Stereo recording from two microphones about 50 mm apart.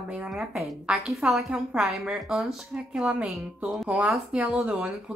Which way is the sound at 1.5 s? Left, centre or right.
Centre.